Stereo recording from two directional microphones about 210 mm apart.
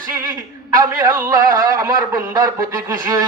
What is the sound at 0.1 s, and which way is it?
A man's voice, 15° right (ahead or behind).